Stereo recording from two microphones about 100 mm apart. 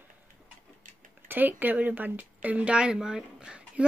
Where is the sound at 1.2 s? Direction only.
20° right (ahead or behind).